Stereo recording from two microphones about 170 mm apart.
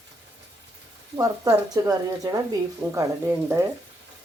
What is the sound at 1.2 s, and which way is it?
A woman's voice, 20° right (ahead or behind).